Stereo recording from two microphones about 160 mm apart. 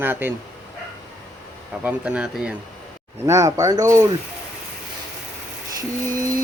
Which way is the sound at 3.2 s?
20° right (ahead or behind).